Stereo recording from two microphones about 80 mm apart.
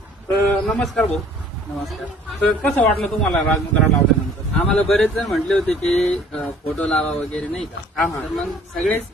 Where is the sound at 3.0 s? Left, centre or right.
Centre.